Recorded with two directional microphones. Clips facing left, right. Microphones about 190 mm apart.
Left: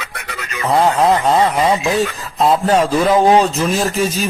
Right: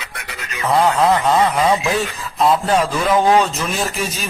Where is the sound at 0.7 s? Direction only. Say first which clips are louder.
Left 1 dB; 30° left (ahead or behind).